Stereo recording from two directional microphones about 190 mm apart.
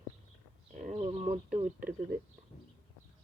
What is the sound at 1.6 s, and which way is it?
Speech, 45° right (ahead or behind).